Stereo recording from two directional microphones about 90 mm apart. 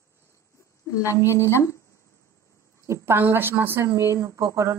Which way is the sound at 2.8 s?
30° right (ahead or behind).